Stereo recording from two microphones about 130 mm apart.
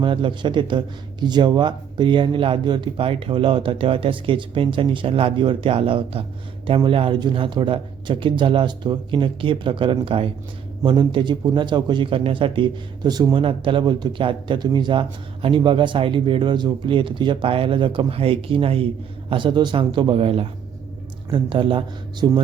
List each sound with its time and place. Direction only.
0.0 s a man's voice: 40° right (ahead or behind)